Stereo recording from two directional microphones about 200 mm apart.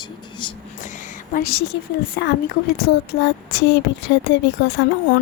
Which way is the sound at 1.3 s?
50° left (ahead or behind).